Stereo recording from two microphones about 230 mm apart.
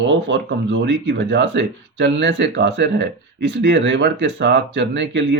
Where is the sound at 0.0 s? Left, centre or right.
Right.